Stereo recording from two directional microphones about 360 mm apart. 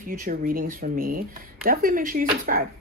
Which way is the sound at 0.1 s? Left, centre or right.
Right.